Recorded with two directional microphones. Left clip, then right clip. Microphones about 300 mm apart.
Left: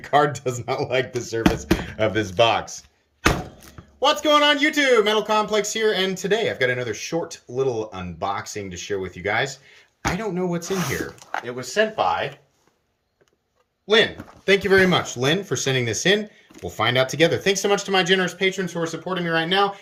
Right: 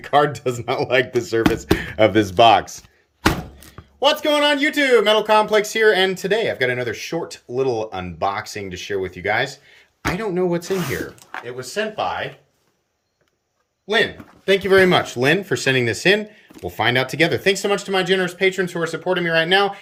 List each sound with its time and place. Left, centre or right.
0.0 s speech: centre
3.7 s speech: centre
11.4 s speech: centre
13.8 s speech: centre